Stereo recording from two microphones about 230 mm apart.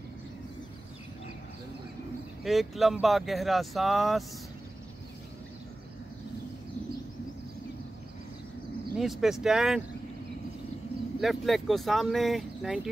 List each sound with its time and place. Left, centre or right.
2.4 s speech: centre
8.9 s speech: centre
11.1 s speech: centre